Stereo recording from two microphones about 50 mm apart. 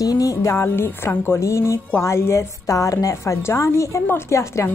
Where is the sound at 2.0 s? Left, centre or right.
Left.